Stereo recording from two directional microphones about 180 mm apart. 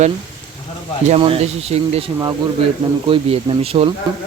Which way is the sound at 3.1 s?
35° right (ahead or behind).